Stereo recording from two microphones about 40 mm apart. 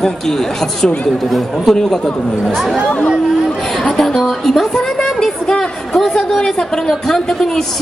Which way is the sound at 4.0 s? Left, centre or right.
Centre.